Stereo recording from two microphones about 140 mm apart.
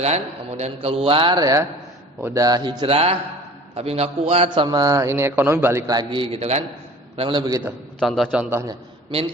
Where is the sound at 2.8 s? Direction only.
45° right (ahead or behind); by 6.2 s 30° right (ahead or behind).